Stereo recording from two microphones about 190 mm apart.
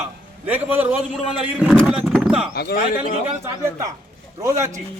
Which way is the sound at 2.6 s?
55° left (ahead or behind).